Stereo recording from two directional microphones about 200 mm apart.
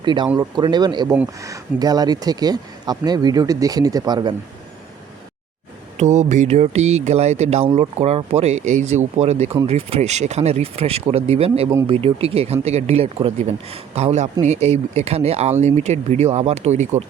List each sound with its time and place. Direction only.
0.0 s speech: 20° right (ahead or behind)
6.0 s speech: 35° right (ahead or behind)